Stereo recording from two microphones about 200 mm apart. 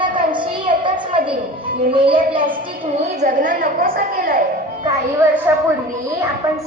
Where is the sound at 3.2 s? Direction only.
40° right (ahead or behind).